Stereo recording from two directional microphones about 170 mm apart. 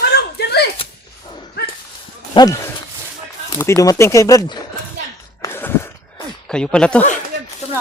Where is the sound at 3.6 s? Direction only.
20° left (ahead or behind).